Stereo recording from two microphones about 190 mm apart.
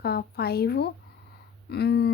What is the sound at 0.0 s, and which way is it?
Speech, 55° left (ahead or behind).